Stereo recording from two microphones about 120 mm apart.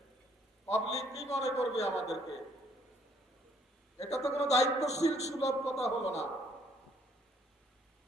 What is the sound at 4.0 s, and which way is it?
A man's voice, 65° left (ahead or behind).